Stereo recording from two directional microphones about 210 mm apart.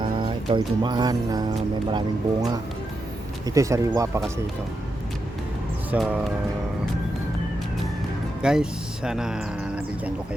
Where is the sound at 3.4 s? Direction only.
15° right (ahead or behind).